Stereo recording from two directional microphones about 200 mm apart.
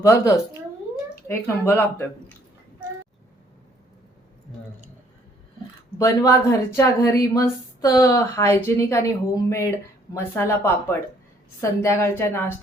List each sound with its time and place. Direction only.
0.0 s a woman's voice: 15° left (ahead or behind)
6.0 s a woman's voice: 15° left (ahead or behind)